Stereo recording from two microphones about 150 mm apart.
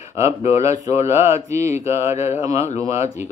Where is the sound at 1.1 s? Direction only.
15° right (ahead or behind).